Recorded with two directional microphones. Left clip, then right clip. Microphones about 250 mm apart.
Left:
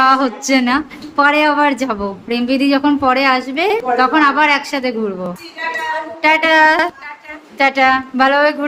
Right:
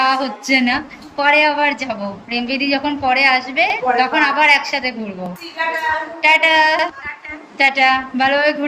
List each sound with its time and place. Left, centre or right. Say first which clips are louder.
0.0 s a woman's voice: left 4 dB; centre
6.2 s a woman's voice: left 2 dB; centre